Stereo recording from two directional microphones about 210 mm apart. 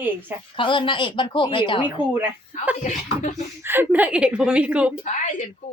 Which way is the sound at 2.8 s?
35° left (ahead or behind).